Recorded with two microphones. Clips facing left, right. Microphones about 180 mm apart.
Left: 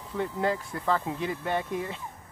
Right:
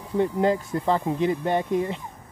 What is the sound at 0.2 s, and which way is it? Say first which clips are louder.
Speech: right 6 dB; 20° right (ahead or behind).